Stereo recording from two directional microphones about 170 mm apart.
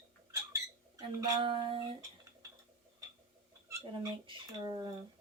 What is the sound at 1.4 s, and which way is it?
Speech, 30° right (ahead or behind).